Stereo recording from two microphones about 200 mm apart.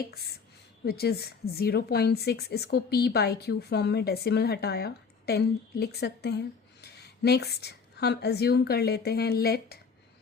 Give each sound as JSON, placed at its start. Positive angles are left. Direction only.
{"t": 0.1, "sound": "a woman's voice", "side_deg": 50}